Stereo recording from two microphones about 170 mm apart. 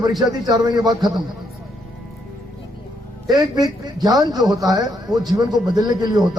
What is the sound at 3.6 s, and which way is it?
A man's voice, 20° right (ahead or behind).